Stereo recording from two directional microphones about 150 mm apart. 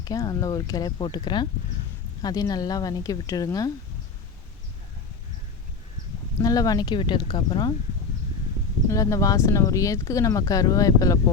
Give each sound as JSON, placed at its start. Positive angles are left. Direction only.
{"t": 0.0, "sound": "speech", "side_deg": 25}
{"t": 6.4, "sound": "speech", "side_deg": 25}
{"t": 8.9, "sound": "speech", "side_deg": 20}